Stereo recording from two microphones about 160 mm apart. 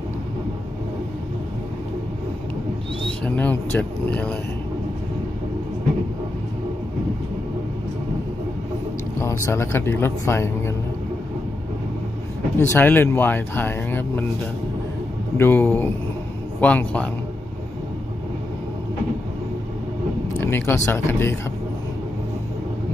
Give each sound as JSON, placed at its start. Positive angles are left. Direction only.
{"t": 3.3, "sound": "speech", "side_deg": 10}
{"t": 9.2, "sound": "speech", "side_deg": 15}
{"t": 12.5, "sound": "speech", "side_deg": 15}
{"t": 15.3, "sound": "speech", "side_deg": 15}
{"t": 20.3, "sound": "speech", "side_deg": 15}